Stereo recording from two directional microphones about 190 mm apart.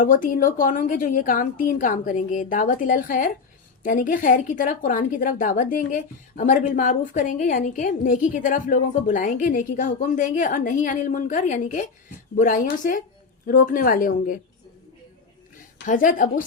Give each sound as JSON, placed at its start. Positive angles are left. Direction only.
{"t": 0.0, "sound": "a woman's voice", "side_deg": 45}
{"t": 15.9, "sound": "a woman's voice", "side_deg": 45}